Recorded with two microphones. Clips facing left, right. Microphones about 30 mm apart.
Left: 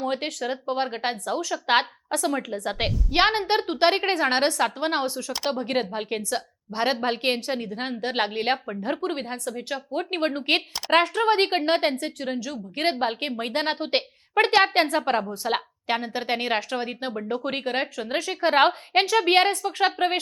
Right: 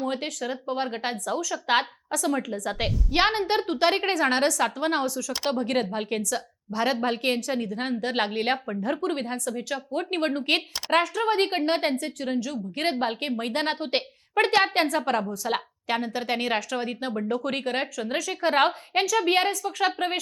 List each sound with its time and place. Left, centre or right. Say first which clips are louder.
0.0 s speech: left 2 dB; left
2.5 s a woman's voice: left 1 dB; left
3.1 s a woman's voice: left 2 dB; left
5.7 s a woman's voice: even; centre
6.3 s a woman's voice: left 1 dB; left
8.1 s a woman's voice: left 2 dB; centre
8.8 s a woman's voice: even; left
10.0 s a woman's voice: left 1 dB; centre
10.9 s speech: left 3 dB; left
11.5 s a woman's voice: left 2 dB; left; by 17.8 s centre
17.9 s a woman's voice: left 1 dB; left
19.2 s speech: left 3 dB; left
19.6 s a woman's voice: left 3 dB; left